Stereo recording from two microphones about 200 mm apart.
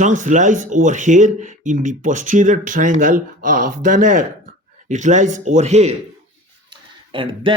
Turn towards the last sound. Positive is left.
turn(degrees=-25)  # may be behind; listen again after turning